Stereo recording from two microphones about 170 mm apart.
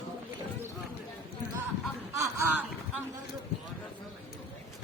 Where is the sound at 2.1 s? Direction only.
15° right (ahead or behind).